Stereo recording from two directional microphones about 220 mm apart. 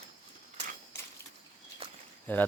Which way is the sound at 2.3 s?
10° left (ahead or behind).